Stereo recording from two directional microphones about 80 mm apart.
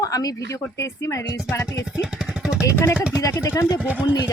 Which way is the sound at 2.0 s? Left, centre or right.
Centre.